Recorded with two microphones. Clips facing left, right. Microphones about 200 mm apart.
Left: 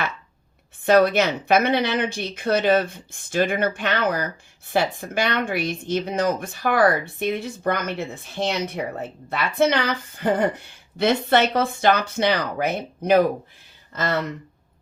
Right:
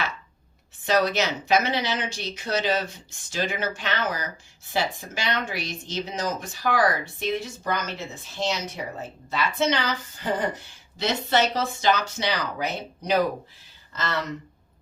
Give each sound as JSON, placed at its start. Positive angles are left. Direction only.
{"t": 0.8, "sound": "speech", "side_deg": 55}